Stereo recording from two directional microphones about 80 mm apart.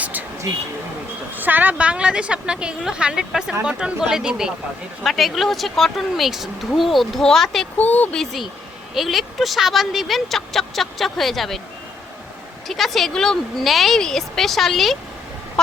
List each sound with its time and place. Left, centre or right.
0.0 s a sound: right
1.4 s a woman's voice: right; by 7.7 s centre
7.8 s speech: left
8.1 s speech: centre
12.6 s speech: centre
15.6 s fowl: centre